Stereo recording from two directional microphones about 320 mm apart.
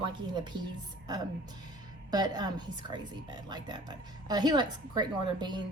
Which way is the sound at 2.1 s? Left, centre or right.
Centre.